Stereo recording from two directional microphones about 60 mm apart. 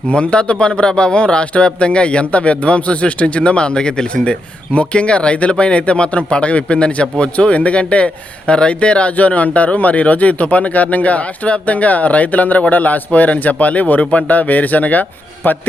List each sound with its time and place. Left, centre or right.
0.1 s a man's voice: centre